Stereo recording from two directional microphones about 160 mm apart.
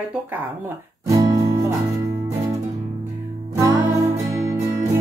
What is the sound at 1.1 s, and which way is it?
Music, 20° right (ahead or behind).